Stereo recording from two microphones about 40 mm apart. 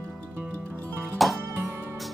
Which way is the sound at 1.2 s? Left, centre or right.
Centre.